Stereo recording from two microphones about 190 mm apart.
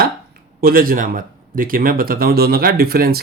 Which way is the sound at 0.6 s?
50° right (ahead or behind).